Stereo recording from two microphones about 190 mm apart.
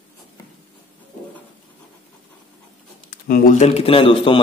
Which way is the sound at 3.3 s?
45° left (ahead or behind).